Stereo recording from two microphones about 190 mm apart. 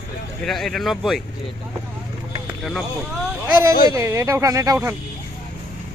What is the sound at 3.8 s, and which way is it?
Speech, 20° right (ahead or behind).